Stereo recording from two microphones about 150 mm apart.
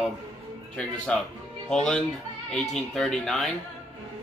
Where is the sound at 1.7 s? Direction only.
5° left (ahead or behind).